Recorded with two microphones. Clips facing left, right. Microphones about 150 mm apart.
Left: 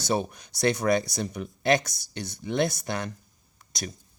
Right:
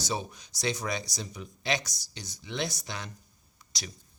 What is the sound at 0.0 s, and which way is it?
Speech, 60° left (ahead or behind).